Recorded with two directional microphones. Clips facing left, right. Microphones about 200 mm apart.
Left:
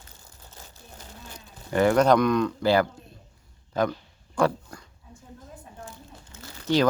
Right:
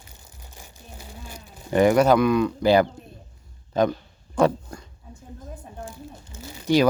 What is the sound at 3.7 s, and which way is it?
Speech, 20° right (ahead or behind).